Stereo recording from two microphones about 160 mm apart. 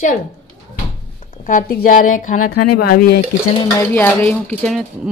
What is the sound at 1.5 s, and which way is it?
A woman's voice, 55° left (ahead or behind).